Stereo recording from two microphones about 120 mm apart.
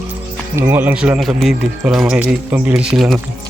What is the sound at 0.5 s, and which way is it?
Speech, 15° right (ahead or behind).